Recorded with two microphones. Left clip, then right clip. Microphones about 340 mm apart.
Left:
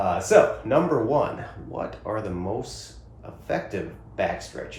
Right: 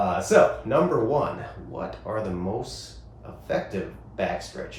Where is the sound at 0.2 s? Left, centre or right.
Left.